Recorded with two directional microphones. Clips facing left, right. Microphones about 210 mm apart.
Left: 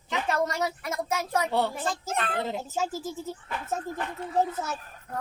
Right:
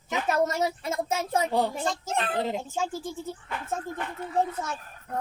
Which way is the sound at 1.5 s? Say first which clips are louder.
Even; 15° right (ahead or behind).